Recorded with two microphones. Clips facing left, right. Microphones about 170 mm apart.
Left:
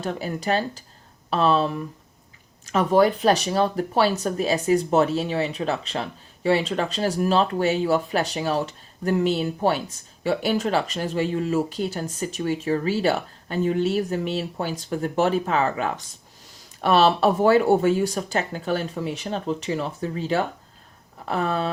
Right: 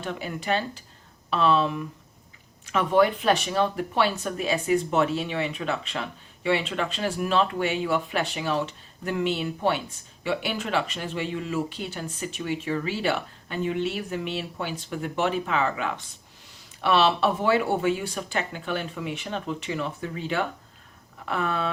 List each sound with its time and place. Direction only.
0.0 s speech: 35° left (ahead or behind)